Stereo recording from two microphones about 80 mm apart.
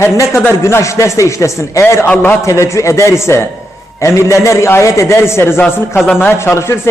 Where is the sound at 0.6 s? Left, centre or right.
Left.